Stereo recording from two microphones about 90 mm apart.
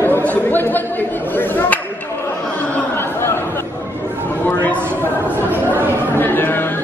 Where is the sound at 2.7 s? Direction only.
25° left (ahead or behind).